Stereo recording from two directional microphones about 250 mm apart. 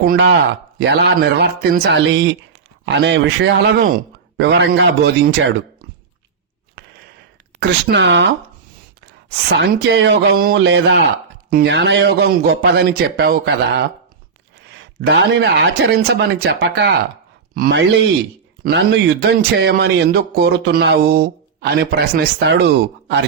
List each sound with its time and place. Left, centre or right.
0.0 s a man's voice: right
7.6 s speech: right
9.3 s a man's voice: right
15.0 s a man's voice: right